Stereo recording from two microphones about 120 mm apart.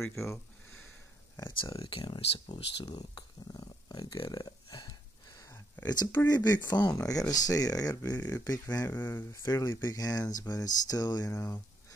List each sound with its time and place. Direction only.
0.0 s speech: 25° left (ahead or behind)
1.9 s a sound: 45° left (ahead or behind); by 5.9 s 25° left (ahead or behind)
5.9 s speech: 35° left (ahead or behind)
9.1 s speech: 20° left (ahead or behind)
9.5 s speech: 30° left (ahead or behind)